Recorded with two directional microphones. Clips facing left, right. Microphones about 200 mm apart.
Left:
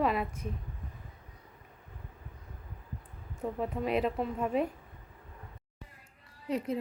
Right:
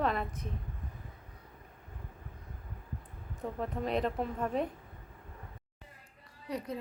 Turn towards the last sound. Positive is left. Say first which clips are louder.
# left 5 dB
turn(degrees=25)  # may be behind; listen again after turning